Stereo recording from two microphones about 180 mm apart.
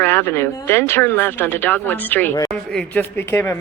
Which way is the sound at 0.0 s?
15° left (ahead or behind).